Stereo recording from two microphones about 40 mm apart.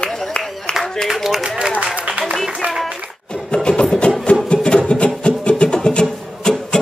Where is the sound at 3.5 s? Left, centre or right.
Left.